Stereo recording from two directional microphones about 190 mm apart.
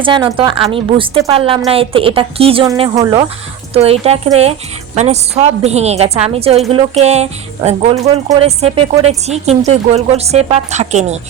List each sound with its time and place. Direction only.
0.0 s a woman's voice: 25° right (ahead or behind)
3.8 s a woman's voice: 30° right (ahead or behind)